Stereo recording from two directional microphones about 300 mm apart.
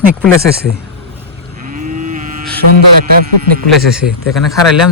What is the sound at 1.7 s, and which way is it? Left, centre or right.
Moo, right.